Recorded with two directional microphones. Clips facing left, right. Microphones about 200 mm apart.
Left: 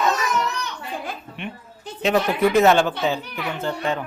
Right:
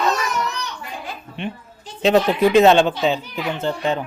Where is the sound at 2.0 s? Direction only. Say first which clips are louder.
Right 4 dB; 30° right (ahead or behind).